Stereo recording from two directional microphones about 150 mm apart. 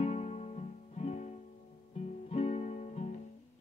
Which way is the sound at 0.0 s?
45° left (ahead or behind).